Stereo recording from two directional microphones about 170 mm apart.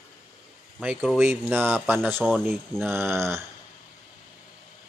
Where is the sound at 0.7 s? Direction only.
5° right (ahead or behind).